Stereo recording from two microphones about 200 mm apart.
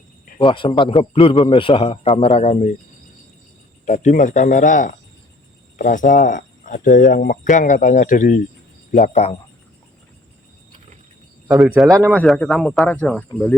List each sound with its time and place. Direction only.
0.3 s a man's voice: 25° left (ahead or behind)
3.8 s speech: 35° left (ahead or behind)
11.6 s speech: centre (ahead or behind)
11.9 s speech: 15° right (ahead or behind)
12.1 s speech: centre (ahead or behind)